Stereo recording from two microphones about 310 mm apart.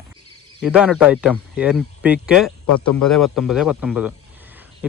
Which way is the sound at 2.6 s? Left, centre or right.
Left.